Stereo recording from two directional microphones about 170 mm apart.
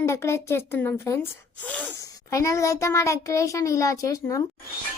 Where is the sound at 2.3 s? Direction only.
20° left (ahead or behind).